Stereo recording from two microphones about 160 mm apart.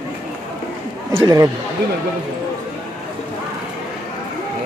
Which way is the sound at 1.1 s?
25° right (ahead or behind).